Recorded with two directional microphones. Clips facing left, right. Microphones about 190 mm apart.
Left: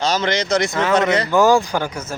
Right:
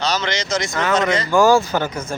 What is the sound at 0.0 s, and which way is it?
Speech, 50° left (ahead or behind).